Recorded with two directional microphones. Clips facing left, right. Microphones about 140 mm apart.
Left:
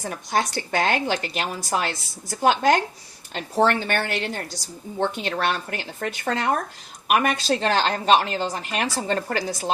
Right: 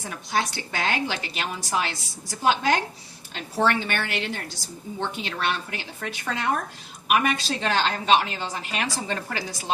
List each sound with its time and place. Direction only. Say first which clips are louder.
0.1 s a woman's voice: left 2 dB; 45° left (ahead or behind)